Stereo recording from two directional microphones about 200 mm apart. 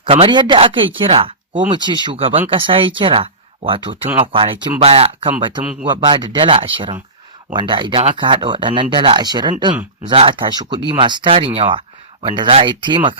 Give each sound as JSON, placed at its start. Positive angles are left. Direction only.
{"t": 0.0, "sound": "speech", "side_deg": -25}